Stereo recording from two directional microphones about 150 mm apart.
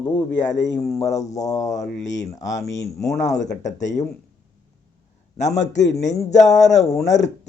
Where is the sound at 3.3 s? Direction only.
50° left (ahead or behind).